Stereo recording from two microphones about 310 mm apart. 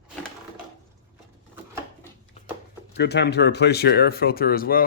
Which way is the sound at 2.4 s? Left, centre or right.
Left.